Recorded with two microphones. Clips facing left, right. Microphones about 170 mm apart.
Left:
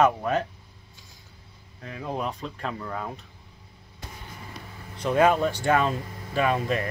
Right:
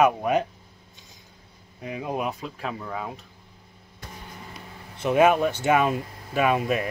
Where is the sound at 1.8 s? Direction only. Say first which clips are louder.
Right 2 dB; 15° right (ahead or behind).